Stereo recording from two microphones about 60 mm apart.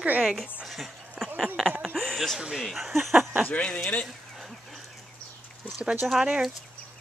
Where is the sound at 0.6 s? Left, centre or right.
Centre.